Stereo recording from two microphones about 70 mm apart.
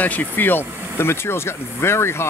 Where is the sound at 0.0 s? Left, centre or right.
Left.